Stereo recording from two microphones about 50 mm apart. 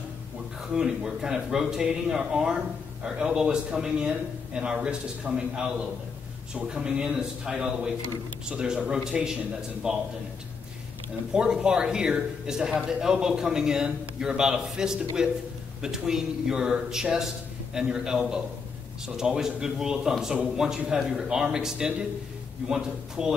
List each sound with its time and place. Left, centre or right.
0.7 s speech: centre
11.3 s speech: centre